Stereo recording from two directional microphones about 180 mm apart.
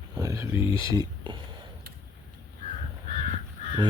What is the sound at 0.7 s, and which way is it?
Speech, 20° right (ahead or behind).